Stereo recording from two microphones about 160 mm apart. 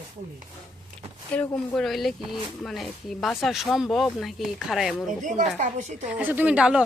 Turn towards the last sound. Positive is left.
turn(degrees=-5)  # may be behind; listen again after turning